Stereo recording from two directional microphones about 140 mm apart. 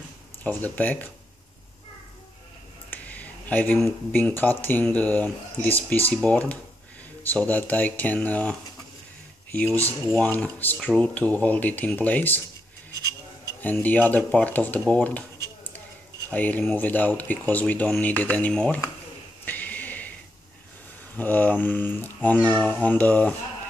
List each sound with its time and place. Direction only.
0.4 s speech: 10° left (ahead or behind)
2.9 s speech: 10° left (ahead or behind)
9.7 s speech: 20° right (ahead or behind)
10.1 s speech: 10° left (ahead or behind)
13.5 s speech: 15° left (ahead or behind)
19.4 s a sound: 10° left (ahead or behind)
21.2 s speech: 10° left (ahead or behind)